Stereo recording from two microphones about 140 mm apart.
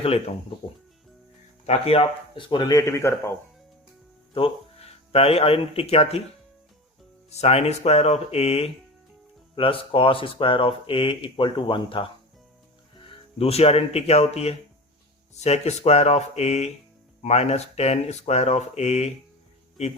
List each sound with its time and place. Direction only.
0.0 s speech: 45° left (ahead or behind)
1.6 s speech: 45° left (ahead or behind); by 3.3 s 20° left (ahead or behind)
4.4 s speech: 45° left (ahead or behind)
7.3 s speech: 50° left (ahead or behind)